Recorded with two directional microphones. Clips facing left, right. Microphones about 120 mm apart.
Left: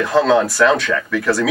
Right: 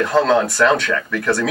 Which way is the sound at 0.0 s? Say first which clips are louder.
Left 1 dB; centre (ahead or behind).